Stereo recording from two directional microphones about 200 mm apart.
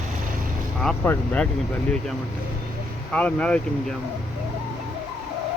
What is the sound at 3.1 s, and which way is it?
Speech, 5° left (ahead or behind).